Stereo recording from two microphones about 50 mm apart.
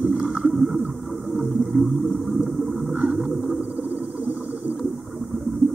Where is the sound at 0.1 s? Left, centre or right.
Centre.